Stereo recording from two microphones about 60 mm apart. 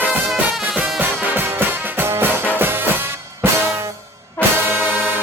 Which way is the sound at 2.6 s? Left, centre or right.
Right.